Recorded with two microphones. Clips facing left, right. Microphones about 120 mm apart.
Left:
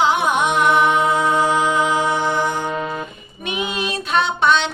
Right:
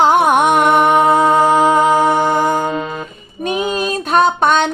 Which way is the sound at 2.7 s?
30° right (ahead or behind).